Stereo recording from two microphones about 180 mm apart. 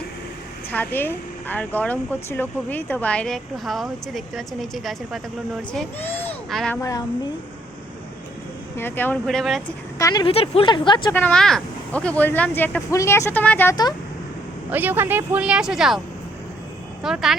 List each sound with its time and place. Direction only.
0.7 s a child's voice: 10° left (ahead or behind)
8.7 s speech: 10° left (ahead or behind)
10.0 s speech: 20° left (ahead or behind)
11.1 s speech: 5° left (ahead or behind)
14.7 s speech: 10° right (ahead or behind)
17.0 s speech: 5° right (ahead or behind)